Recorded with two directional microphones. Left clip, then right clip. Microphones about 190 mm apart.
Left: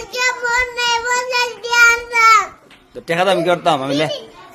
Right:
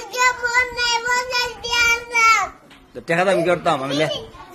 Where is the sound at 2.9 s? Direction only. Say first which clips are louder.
Left 2 dB; 20° left (ahead or behind).